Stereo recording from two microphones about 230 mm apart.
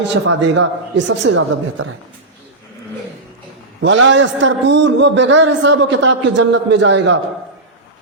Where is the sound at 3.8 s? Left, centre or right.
Right.